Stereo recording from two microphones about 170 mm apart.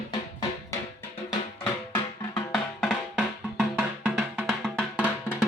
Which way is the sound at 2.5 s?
5° left (ahead or behind).